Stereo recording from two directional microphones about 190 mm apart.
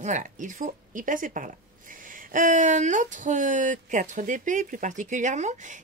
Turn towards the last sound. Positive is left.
turn(degrees=-40)  # may be behind; listen again after turning